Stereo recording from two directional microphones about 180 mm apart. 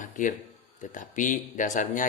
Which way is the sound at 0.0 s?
45° left (ahead or behind).